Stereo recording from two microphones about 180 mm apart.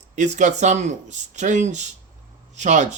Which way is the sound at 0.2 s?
40° right (ahead or behind).